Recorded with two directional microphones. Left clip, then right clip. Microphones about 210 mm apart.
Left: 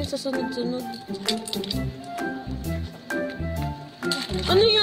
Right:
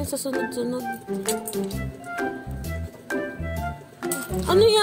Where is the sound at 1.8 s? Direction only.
Centre (ahead or behind).